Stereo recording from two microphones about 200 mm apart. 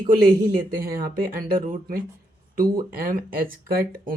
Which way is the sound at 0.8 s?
50° right (ahead or behind).